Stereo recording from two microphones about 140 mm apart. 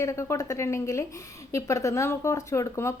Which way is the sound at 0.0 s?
20° left (ahead or behind).